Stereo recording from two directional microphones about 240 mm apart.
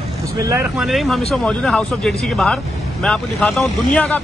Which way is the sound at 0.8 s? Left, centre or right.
Centre.